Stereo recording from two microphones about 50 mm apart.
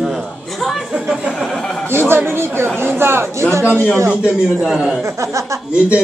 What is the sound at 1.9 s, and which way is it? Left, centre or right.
Speech, right.